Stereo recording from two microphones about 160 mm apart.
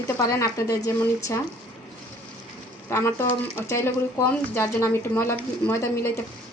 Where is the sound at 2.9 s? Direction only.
15° left (ahead or behind).